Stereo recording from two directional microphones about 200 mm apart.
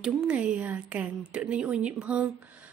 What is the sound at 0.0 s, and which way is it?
Speech, 5° right (ahead or behind).